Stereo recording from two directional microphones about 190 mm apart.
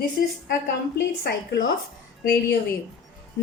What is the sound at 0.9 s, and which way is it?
A woman's voice, 60° left (ahead or behind).